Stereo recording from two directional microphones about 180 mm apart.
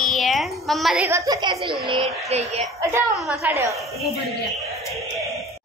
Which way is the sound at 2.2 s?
35° right (ahead or behind).